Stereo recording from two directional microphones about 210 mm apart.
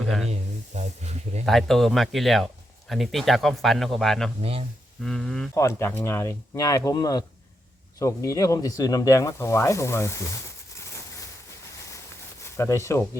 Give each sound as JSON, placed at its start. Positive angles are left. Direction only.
{"t": 0.0, "sound": "speech", "side_deg": 0}
{"t": 0.3, "sound": "speech", "side_deg": -30}
{"t": 1.5, "sound": "speech", "side_deg": 0}
{"t": 4.4, "sound": "speech", "side_deg": -30}
{"t": 5.0, "sound": "speech", "side_deg": 5}
{"t": 12.4, "sound": "speech", "side_deg": 15}